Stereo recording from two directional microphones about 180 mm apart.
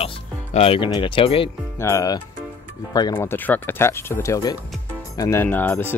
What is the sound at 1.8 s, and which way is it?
Speech, 15° left (ahead or behind).